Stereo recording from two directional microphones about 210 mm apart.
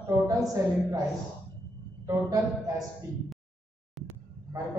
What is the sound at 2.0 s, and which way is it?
Speech, 15° right (ahead or behind).